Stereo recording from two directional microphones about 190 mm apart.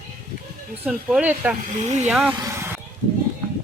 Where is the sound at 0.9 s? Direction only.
5° right (ahead or behind).